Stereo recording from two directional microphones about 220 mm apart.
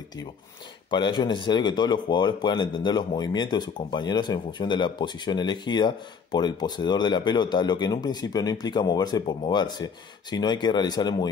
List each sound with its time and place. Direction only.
0.8 s speech: 20° left (ahead or behind)